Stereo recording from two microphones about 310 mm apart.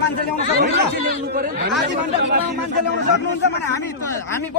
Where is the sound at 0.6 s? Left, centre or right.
Right.